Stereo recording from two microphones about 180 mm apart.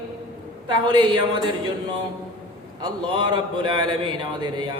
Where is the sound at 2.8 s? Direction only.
25° right (ahead or behind).